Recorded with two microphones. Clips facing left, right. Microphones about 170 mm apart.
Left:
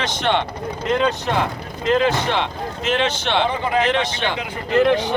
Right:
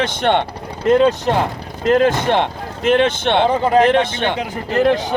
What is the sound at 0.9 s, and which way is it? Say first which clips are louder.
Speech: right 7 dB; 40° right (ahead or behind).